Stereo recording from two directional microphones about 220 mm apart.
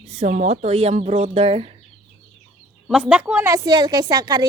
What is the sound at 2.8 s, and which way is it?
Speech, centre (ahead or behind).